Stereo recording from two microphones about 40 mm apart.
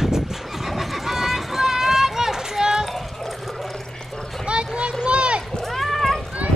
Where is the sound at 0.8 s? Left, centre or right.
Centre.